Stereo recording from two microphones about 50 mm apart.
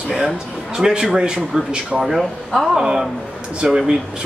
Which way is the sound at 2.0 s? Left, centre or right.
Centre.